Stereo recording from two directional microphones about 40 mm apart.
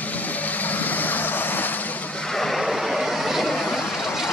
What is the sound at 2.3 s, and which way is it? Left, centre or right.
Vehicle, centre.